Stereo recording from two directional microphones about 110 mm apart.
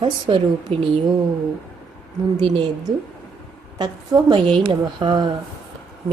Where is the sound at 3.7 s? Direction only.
40° right (ahead or behind).